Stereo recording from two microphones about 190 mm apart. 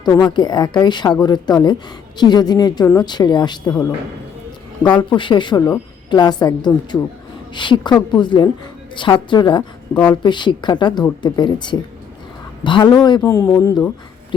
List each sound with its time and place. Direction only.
0.0 s a woman's voice: 20° left (ahead or behind)
9.9 s speech: 5° left (ahead or behind)
10.2 s a woman's voice: 25° left (ahead or behind)